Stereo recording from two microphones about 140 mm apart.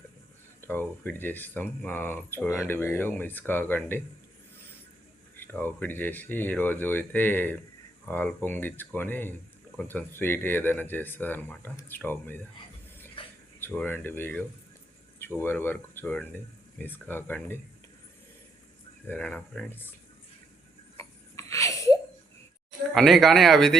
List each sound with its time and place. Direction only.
0.6 s speech: 15° left (ahead or behind)
5.4 s speech: 15° left (ahead or behind)
13.2 s a sound: 40° left (ahead or behind)
13.6 s speech: 15° left (ahead or behind)
19.0 s speech: 10° left (ahead or behind)
20.9 s a sound: 20° left (ahead or behind)
22.9 s speech: centre (ahead or behind)